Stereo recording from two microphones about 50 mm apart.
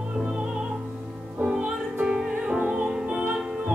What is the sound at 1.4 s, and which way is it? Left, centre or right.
Music, centre.